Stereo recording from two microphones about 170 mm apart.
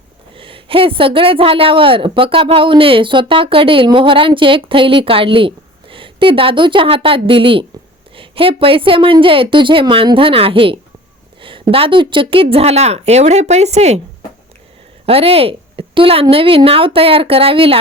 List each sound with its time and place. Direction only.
0.3 s a woman's voice: 30° right (ahead or behind)
15.0 s a woman's voice: 35° right (ahead or behind)